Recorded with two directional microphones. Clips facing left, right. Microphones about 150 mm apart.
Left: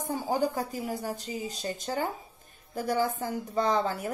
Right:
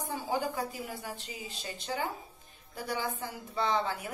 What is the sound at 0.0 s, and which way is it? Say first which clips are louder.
A woman's voice: left 5 dB; 40° left (ahead or behind).